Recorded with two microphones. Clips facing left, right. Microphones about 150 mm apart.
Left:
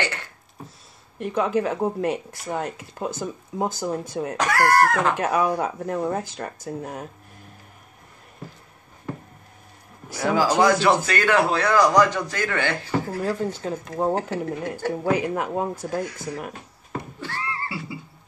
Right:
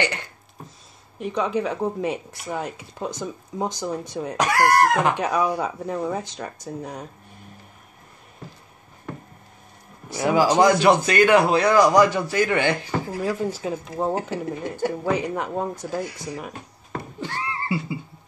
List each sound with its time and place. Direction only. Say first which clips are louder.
0.0 s a sound: right 3 dB; 15° right (ahead or behind)
1.2 s speech: left 1 dB; 5° left (ahead or behind)
4.4 s a man's voice: right 1 dB; 15° right (ahead or behind)
5.1 s speech: left 1 dB; 5° left (ahead or behind)
10.1 s a man's voice: right 2 dB; 20° right (ahead or behind)
15.0 s speech: left 5 dB; 5° left (ahead or behind)
15.9 s a man's voice: left 1 dB; 10° right (ahead or behind)
17.2 s neigh: right 4 dB; 20° right (ahead or behind)